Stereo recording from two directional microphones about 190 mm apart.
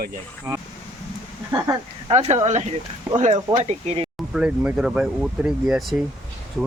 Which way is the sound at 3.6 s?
35° right (ahead or behind).